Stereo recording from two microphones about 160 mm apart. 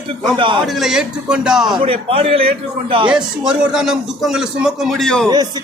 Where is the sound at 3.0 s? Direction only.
5° right (ahead or behind).